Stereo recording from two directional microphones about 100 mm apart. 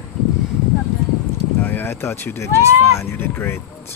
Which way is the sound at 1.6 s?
20° left (ahead or behind).